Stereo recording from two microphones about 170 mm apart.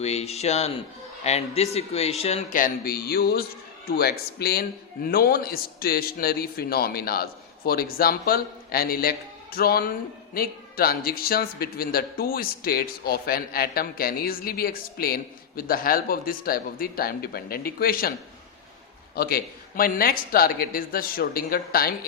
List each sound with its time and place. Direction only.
0.0 s speech: 40° left (ahead or behind)
2.5 s a man's voice: 55° left (ahead or behind)
19.1 s a man's voice: 65° left (ahead or behind)